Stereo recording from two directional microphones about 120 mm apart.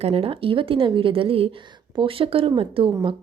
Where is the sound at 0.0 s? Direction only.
55° right (ahead or behind).